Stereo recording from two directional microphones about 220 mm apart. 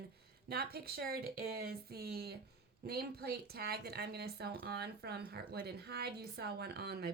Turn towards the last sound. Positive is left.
turn(degrees=-45)  # may be behind; listen again after turning